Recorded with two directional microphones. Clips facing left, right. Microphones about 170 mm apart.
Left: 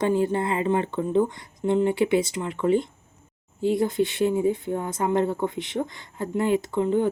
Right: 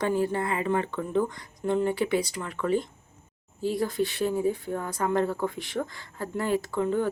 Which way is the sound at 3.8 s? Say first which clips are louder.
Left 2 dB; 20° left (ahead or behind).